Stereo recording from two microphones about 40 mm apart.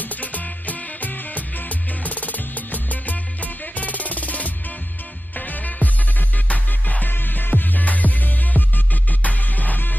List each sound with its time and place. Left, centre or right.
0.0 s music: left
7.1 s music: left